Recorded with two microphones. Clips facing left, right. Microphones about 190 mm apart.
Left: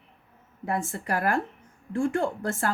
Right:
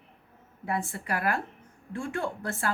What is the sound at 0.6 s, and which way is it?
Speech, 45° left (ahead or behind).